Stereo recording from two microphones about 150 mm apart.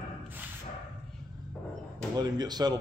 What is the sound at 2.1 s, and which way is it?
Speech, 25° right (ahead or behind).